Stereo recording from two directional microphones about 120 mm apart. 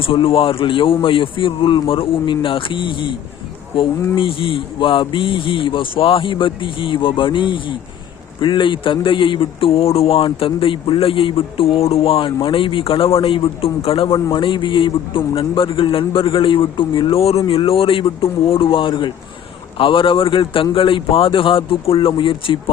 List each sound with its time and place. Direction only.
0.0 s a man's voice: 50° left (ahead or behind)
4.1 s a man's voice: 45° left (ahead or behind)